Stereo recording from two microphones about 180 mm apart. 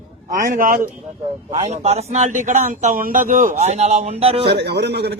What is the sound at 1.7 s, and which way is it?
Speech, 35° right (ahead or behind).